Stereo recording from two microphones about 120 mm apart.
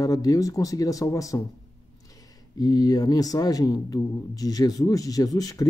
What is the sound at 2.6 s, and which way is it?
Speech, 35° left (ahead or behind).